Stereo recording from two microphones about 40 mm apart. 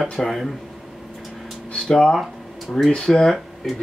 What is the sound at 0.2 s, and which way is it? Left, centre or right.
Speech, centre.